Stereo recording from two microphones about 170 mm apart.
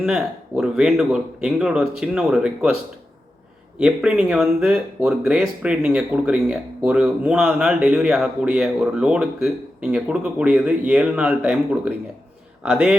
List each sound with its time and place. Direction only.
0.0 s speech: 5° right (ahead or behind)
3.8 s speech: 5° right (ahead or behind)